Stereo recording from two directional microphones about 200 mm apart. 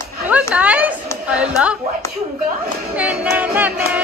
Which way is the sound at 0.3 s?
5° right (ahead or behind).